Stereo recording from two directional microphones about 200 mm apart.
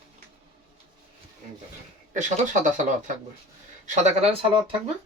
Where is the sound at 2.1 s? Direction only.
40° right (ahead or behind).